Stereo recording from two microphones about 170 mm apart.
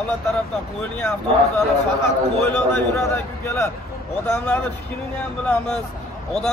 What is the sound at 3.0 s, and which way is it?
Speech, 15° left (ahead or behind).